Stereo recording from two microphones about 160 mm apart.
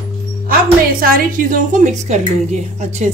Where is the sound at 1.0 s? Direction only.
60° right (ahead or behind).